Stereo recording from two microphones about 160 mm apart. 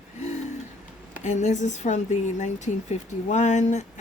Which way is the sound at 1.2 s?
50° left (ahead or behind).